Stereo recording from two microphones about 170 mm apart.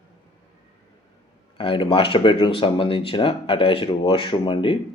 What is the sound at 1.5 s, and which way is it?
Speech, 30° left (ahead or behind).